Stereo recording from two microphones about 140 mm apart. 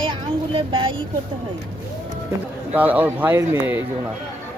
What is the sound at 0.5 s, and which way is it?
Speech, 40° right (ahead or behind).